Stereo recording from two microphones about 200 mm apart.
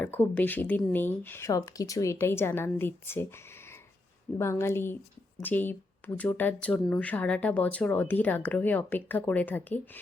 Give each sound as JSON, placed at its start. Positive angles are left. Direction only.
{"t": 0.0, "sound": "speech", "side_deg": 10}